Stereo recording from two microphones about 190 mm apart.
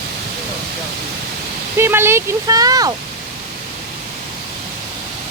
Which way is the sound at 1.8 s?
10° right (ahead or behind).